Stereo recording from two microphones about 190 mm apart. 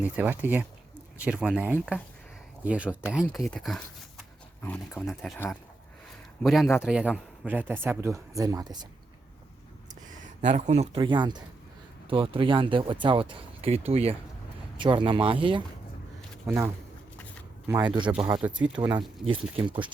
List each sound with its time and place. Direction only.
0.0 s speech: 10° right (ahead or behind)
3.2 s speech: 10° left (ahead or behind)
6.4 s speech: centre (ahead or behind); by 8.9 s 20° right (ahead or behind)
10.2 s speech: 35° right (ahead or behind)
16.5 s speech: 15° right (ahead or behind)
17.7 s speech: 25° right (ahead or behind)